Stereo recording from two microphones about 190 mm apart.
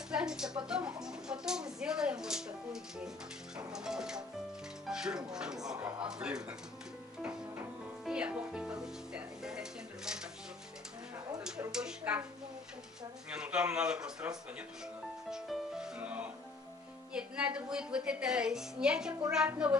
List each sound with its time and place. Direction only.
0.1 s speech: 5° right (ahead or behind)
7.2 s music: 10° right (ahead or behind)
8.0 s speech: 5° right (ahead or behind)
11.7 s speech: 5° right (ahead or behind)
13.3 s speech: 5° right (ahead or behind)